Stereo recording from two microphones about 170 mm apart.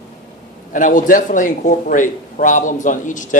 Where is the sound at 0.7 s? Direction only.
50° left (ahead or behind).